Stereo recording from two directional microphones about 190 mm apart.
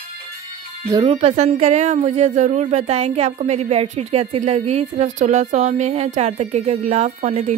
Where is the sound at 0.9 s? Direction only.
30° right (ahead or behind).